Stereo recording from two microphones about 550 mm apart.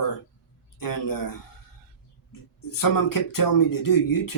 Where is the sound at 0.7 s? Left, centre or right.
Left.